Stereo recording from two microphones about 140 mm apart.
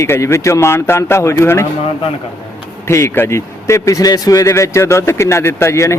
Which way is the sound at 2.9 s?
20° left (ahead or behind).